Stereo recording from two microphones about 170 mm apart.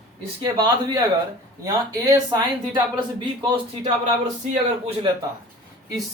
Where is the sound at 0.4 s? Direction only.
25° right (ahead or behind).